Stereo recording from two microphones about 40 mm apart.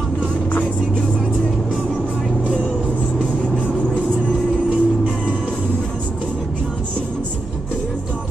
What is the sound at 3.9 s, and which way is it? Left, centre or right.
Music, right.